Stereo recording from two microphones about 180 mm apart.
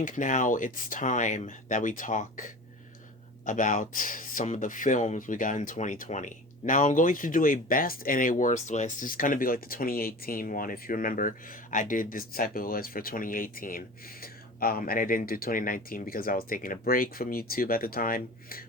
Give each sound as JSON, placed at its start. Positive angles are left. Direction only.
{"t": 0.0, "sound": "speech", "side_deg": 45}